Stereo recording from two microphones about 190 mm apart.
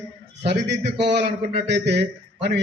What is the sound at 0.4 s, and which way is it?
A man's voice, 65° right (ahead or behind).